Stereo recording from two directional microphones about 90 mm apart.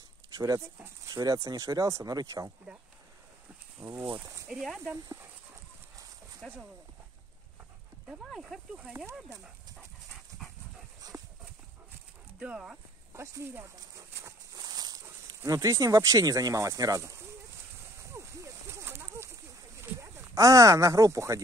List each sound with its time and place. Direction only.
1.1 s speech: 45° right (ahead or behind)
3.8 s speech: 25° right (ahead or behind)
4.5 s speech: 5° right (ahead or behind)
6.4 s speech: 5° left (ahead or behind)
8.3 s speech: centre (ahead or behind)
9.0 s speech: 25° right (ahead or behind)
11.1 s clip-clop: 35° right (ahead or behind)
12.4 s speech: 10° right (ahead or behind)
13.1 s speech: 30° right (ahead or behind)
13.7 s a sound: 40° right (ahead or behind)
19.8 s speech: 35° right (ahead or behind)